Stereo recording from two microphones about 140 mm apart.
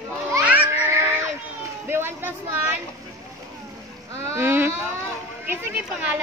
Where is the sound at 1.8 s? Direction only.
15° right (ahead or behind).